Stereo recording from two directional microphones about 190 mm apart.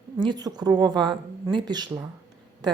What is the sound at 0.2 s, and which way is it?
A woman's voice, 20° right (ahead or behind).